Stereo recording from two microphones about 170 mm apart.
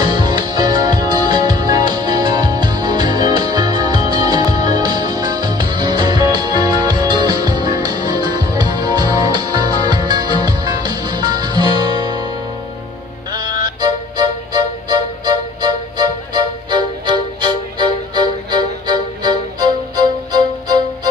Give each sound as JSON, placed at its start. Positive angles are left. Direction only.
{"t": 0.0, "sound": "music", "side_deg": -25}
{"t": 13.3, "sound": "music", "side_deg": -25}